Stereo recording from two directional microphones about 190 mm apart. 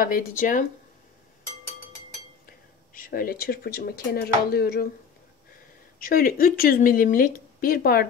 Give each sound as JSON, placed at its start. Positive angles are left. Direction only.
{"t": 0.0, "sound": "speech", "side_deg": 45}
{"t": 2.9, "sound": "speech", "side_deg": 50}
{"t": 5.9, "sound": "speech", "side_deg": 50}